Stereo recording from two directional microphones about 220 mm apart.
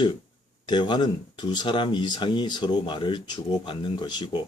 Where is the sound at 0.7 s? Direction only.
20° left (ahead or behind).